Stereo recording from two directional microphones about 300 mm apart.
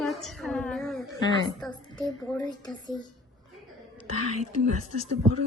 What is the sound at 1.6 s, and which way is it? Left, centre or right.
A woman's voice, centre.